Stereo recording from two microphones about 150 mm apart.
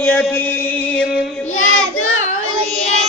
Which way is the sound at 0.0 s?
5° left (ahead or behind).